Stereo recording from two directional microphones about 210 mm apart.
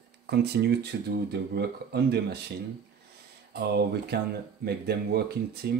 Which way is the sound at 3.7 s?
50° right (ahead or behind).